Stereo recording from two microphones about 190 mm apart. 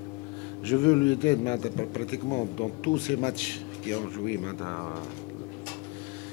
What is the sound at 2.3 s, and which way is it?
Speech, 30° left (ahead or behind).